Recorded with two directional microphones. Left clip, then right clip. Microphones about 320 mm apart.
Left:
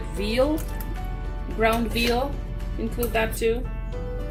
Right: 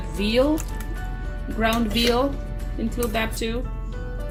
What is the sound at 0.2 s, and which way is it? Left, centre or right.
Speech, right.